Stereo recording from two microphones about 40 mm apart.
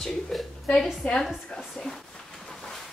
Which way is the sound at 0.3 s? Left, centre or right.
Centre.